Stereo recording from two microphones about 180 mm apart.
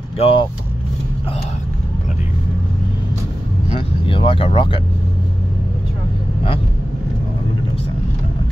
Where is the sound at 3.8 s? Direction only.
30° left (ahead or behind).